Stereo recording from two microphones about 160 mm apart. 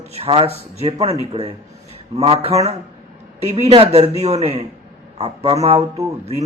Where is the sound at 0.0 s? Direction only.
40° right (ahead or behind).